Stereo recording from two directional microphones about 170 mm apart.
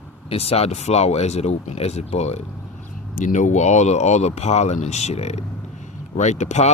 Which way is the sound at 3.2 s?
50° left (ahead or behind).